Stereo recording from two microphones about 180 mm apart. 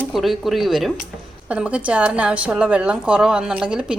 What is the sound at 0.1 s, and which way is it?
A woman's voice, centre (ahead or behind).